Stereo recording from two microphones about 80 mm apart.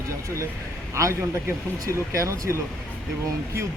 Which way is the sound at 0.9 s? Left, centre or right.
Right.